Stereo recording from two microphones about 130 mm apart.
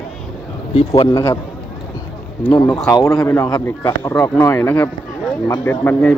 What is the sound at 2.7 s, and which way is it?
Speech, 5° left (ahead or behind).